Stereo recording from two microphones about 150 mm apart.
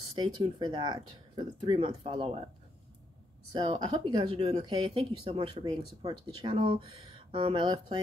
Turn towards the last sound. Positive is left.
turn(degrees=-35)  # may be behind; listen again after turning